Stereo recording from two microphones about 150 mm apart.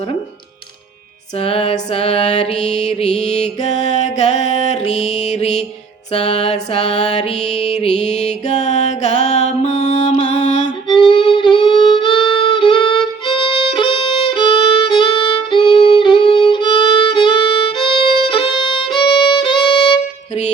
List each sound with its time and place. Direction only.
1.4 s mantra: 40° left (ahead or behind)
7.5 s music: 45° left (ahead or behind)
10.8 s music: 35° left (ahead or behind)
18.3 s violin: 35° left (ahead or behind)